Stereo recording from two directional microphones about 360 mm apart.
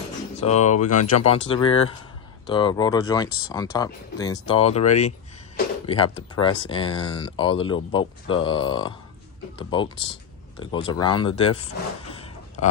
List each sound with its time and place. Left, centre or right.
0.4 s speech: centre